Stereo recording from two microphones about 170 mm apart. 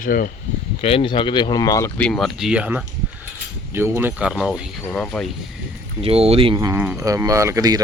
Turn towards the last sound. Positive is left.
turn(degrees=-20)  # may be behind; listen again after turning